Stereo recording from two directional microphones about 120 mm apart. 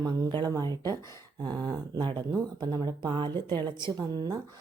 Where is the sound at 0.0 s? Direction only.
35° right (ahead or behind).